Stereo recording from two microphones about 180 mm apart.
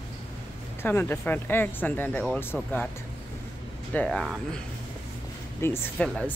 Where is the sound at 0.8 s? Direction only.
10° left (ahead or behind).